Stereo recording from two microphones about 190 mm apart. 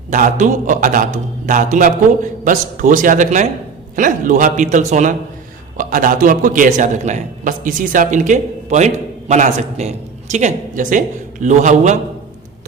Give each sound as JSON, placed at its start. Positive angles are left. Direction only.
{"t": 0.1, "sound": "a man's voice", "side_deg": -40}